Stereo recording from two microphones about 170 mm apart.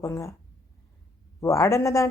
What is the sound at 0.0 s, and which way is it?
Speech, 20° left (ahead or behind).